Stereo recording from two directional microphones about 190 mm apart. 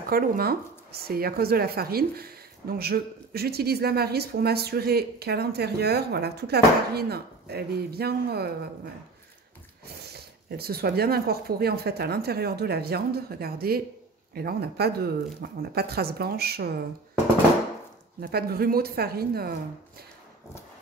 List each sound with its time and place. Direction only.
0.1 s speech: 55° right (ahead or behind)
10.1 s speech: 55° right (ahead or behind)
18.2 s speech: 50° right (ahead or behind)